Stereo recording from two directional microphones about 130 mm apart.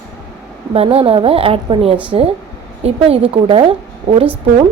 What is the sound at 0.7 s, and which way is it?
A woman's voice, 45° right (ahead or behind).